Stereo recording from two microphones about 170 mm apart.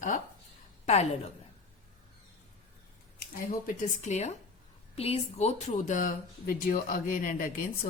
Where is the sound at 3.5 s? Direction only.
45° left (ahead or behind).